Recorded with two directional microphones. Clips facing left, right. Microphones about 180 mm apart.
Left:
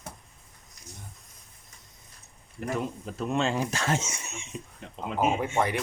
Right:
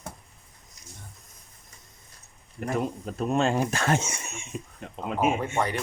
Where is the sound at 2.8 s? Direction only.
50° right (ahead or behind).